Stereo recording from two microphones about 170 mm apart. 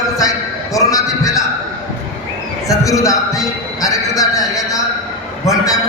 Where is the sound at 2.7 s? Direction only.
20° left (ahead or behind).